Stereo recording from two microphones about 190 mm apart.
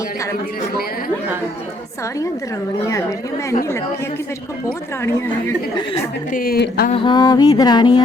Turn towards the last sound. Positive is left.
turn(degrees=25)  # may be behind; listen again after turning